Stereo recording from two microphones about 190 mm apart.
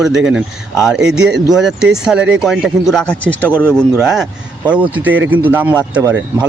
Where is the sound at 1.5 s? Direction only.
Centre (ahead or behind).